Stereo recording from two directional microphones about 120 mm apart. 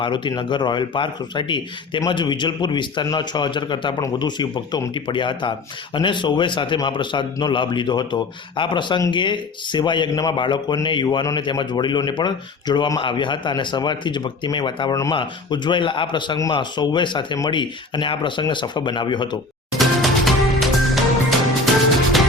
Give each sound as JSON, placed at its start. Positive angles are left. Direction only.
{"t": 0.0, "sound": "speech", "side_deg": 40}
{"t": 19.8, "sound": "music", "side_deg": 0}